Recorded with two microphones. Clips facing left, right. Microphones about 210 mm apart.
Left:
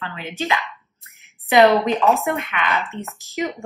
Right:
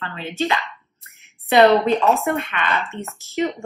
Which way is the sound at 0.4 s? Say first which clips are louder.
Right 2 dB; 15° left (ahead or behind).